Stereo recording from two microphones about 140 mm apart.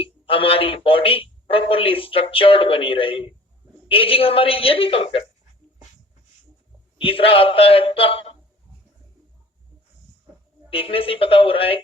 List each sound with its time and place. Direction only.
0.0 s speech: 40° left (ahead or behind)
7.0 s speech: 40° left (ahead or behind)
10.7 s speech: 40° left (ahead or behind)